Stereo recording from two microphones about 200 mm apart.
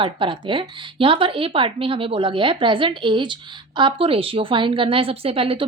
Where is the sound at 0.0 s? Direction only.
25° right (ahead or behind).